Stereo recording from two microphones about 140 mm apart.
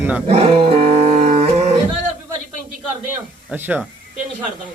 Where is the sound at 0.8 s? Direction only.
55° right (ahead or behind).